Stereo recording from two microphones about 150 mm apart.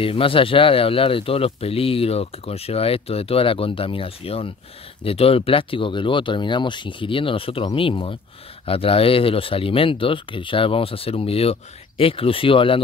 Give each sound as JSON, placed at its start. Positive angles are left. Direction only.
{"t": 0.0, "sound": "speech", "side_deg": 35}